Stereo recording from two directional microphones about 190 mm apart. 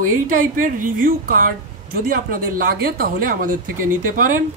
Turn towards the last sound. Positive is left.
turn(degrees=-45)  # may be behind; listen again after turning